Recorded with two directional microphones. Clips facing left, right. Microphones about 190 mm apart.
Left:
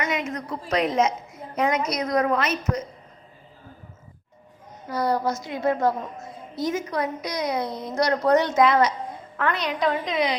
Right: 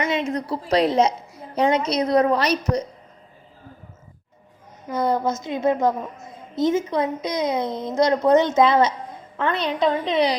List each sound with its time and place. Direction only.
0.0 s a woman's voice: 30° right (ahead or behind)
4.9 s a woman's voice: 20° right (ahead or behind)